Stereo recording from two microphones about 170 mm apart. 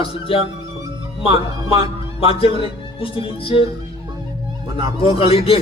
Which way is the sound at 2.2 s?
35° left (ahead or behind).